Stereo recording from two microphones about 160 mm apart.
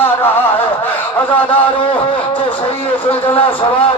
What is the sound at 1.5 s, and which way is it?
A man's voice, 35° left (ahead or behind).